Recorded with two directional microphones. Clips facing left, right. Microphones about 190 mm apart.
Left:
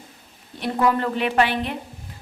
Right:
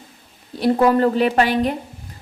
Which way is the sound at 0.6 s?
35° right (ahead or behind).